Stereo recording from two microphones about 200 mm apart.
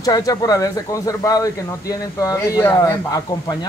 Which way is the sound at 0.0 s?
20° left (ahead or behind).